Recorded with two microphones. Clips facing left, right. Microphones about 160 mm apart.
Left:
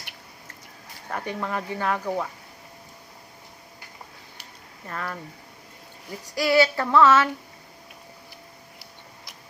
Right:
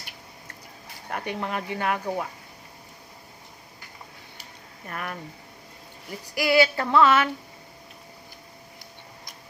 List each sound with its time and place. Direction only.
1.1 s speech: 15° right (ahead or behind)
4.9 s speech: 20° right (ahead or behind)
6.3 s speech: 15° right (ahead or behind)